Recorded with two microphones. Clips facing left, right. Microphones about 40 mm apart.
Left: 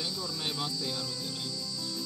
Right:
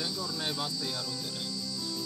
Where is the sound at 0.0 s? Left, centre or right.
Centre.